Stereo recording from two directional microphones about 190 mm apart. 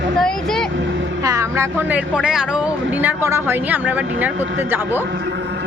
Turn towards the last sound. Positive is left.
turn(degrees=-10)  # may be behind; listen again after turning